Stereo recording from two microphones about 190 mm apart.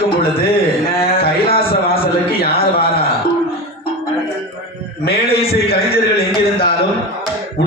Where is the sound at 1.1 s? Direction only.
30° left (ahead or behind).